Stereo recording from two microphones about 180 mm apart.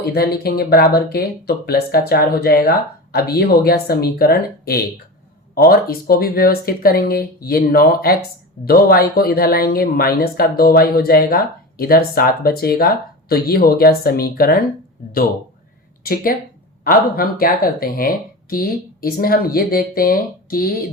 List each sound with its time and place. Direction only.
0.0 s speech: 60° left (ahead or behind)
16.8 s speech: 55° left (ahead or behind)